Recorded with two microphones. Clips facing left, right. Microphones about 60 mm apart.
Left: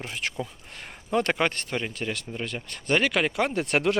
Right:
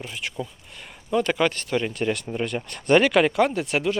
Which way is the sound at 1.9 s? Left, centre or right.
Centre.